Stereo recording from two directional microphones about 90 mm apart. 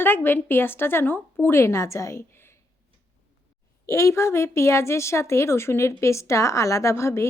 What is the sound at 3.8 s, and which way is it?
A woman's voice, 30° left (ahead or behind).